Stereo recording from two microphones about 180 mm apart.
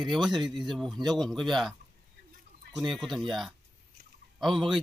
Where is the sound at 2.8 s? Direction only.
Centre (ahead or behind).